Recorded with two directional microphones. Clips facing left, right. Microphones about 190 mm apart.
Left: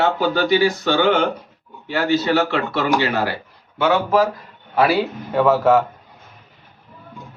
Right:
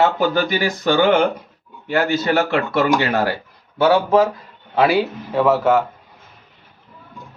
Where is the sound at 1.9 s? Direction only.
50° right (ahead or behind).